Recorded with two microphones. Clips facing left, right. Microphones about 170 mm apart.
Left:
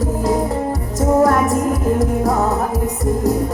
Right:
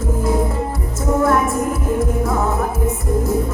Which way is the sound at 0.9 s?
40° left (ahead or behind).